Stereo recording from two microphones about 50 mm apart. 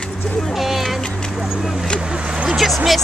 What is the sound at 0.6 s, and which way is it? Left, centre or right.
Music, centre.